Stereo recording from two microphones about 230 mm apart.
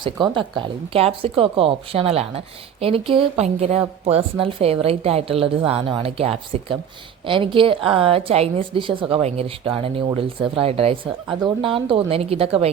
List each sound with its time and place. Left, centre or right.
0.0 s a woman's voice: right